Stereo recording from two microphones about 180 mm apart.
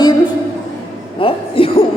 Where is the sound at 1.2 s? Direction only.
30° left (ahead or behind).